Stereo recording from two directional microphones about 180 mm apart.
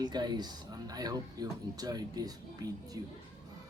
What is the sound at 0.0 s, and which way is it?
Speech, 25° right (ahead or behind).